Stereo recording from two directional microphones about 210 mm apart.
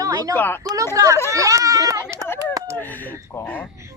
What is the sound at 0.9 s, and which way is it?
Speech, 15° right (ahead or behind).